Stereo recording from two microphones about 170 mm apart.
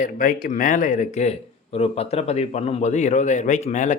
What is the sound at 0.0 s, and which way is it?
Speech, 55° left (ahead or behind).